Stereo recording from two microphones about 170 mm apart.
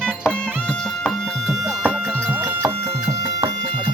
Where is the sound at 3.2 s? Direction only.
30° right (ahead or behind).